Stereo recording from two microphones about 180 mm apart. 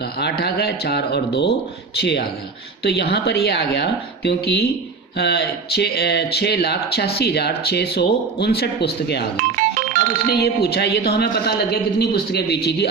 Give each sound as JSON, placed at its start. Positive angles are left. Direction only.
{"t": 0.0, "sound": "speech", "side_deg": 65}
{"t": 9.4, "sound": "music", "side_deg": -45}
{"t": 10.2, "sound": "speech", "side_deg": 65}